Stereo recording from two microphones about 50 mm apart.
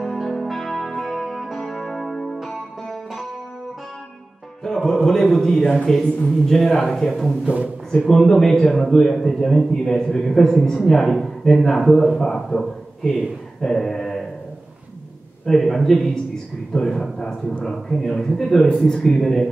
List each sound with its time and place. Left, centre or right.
0.0 s music: centre
4.6 s a man's voice: centre
7.4 s a man's voice: right
8.0 s a man's voice: centre
15.4 s a man's voice: centre